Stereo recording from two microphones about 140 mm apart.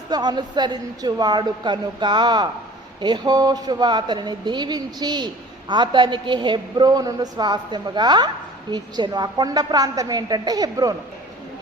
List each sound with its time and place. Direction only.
0.1 s a woman's voice: 30° right (ahead or behind)